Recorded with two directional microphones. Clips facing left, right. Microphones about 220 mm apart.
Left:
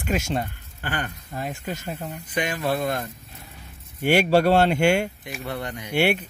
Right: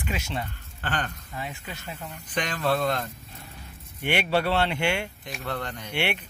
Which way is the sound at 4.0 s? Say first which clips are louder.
Left 7 dB; 45° left (ahead or behind).